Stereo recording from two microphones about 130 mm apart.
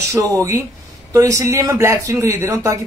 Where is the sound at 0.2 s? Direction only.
15° right (ahead or behind).